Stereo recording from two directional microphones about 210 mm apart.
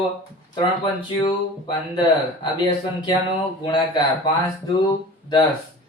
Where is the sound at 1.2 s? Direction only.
20° left (ahead or behind).